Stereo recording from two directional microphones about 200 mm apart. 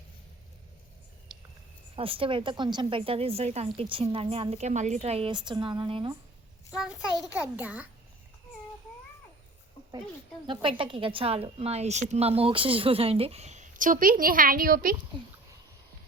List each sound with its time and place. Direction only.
2.0 s a woman's voice: 25° right (ahead or behind)
6.7 s a child's voice: 5° right (ahead or behind)
10.4 s a woman's voice: 25° right (ahead or behind); by 14.9 s 45° right (ahead or behind)